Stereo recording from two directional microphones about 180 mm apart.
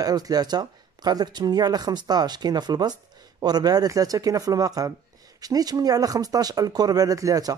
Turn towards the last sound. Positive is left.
turn(degrees=-20)  # may be behind; listen again after turning